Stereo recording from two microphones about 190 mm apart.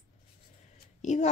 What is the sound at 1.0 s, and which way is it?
Speech, 35° left (ahead or behind).